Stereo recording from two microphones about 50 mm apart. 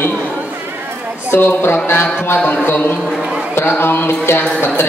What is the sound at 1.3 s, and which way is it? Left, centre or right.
Speech, left.